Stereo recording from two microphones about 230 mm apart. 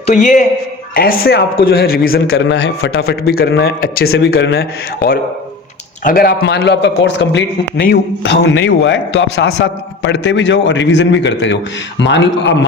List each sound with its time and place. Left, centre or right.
0.0 s a man's voice: left